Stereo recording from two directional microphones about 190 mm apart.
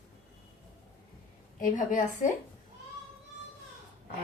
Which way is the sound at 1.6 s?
40° left (ahead or behind).